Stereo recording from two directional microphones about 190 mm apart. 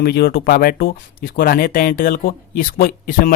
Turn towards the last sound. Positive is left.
turn(degrees=50)  # may be behind; listen again after turning